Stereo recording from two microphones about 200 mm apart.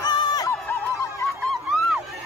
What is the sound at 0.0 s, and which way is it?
Music, 20° left (ahead or behind).